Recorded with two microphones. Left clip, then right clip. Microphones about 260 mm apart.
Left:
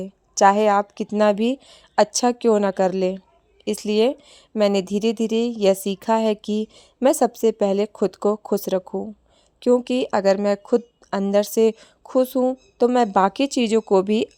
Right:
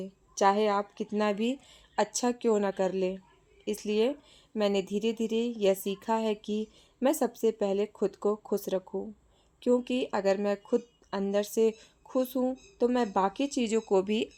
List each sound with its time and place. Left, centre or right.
0.0 s speech: left